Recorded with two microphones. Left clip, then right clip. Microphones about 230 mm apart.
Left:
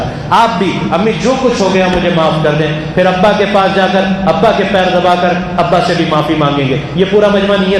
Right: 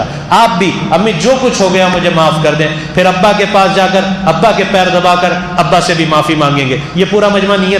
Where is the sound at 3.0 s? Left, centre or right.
Right.